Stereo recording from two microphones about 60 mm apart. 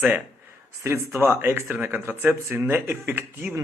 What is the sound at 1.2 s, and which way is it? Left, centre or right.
Speech, right.